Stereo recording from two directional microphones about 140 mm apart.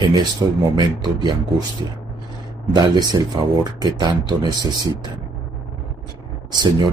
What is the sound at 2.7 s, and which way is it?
Speech, 30° right (ahead or behind).